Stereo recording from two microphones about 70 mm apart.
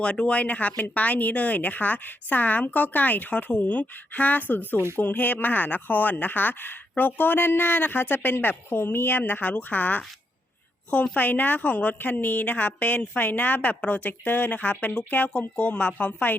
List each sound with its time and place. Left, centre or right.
0.0 s a woman's voice: centre